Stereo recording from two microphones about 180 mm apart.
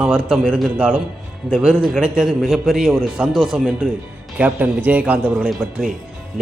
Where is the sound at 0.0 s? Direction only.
5° right (ahead or behind).